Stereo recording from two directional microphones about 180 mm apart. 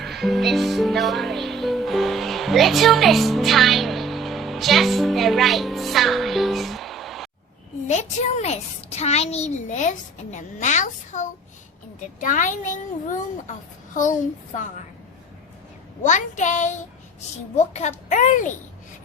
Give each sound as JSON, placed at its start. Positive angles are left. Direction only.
{"t": 0.0, "sound": "music", "side_deg": 0}
{"t": 7.9, "sound": "a child's voice", "side_deg": 40}
{"t": 16.0, "sound": "a child's voice", "side_deg": 45}